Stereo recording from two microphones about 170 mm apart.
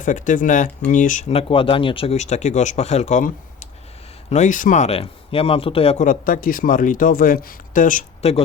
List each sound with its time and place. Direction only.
0.0 s speech: 50° left (ahead or behind)
1.3 s speech: 35° left (ahead or behind)
6.1 s speech: 55° left (ahead or behind)